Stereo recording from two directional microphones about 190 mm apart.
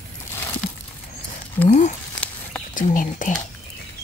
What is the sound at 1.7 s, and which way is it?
Speech, 40° left (ahead or behind).